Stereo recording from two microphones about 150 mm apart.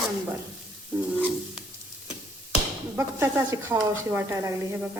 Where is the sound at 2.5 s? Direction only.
20° right (ahead or behind).